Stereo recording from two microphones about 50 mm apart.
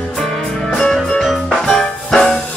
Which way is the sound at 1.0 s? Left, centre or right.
Centre.